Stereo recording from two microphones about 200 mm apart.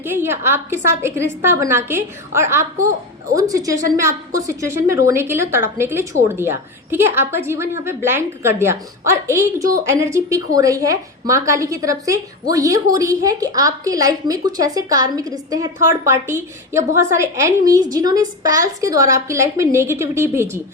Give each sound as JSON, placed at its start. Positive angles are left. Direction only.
{"t": 0.0, "sound": "a woman's voice", "side_deg": -10}